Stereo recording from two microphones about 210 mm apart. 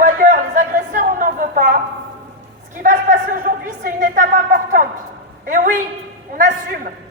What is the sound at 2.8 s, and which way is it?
A woman's voice, 40° right (ahead or behind).